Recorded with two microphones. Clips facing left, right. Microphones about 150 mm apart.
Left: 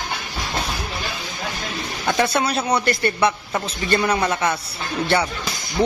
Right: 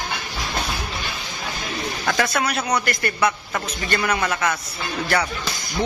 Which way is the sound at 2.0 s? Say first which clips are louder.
Left 3 dB; 30° left (ahead or behind).